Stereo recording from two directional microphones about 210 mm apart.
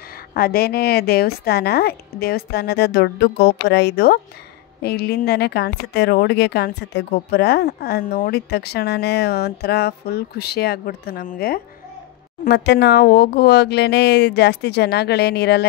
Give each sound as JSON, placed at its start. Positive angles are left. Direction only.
{"t": 0.3, "sound": "speech", "side_deg": 45}